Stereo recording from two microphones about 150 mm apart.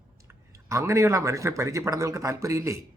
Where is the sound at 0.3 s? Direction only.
20° right (ahead or behind).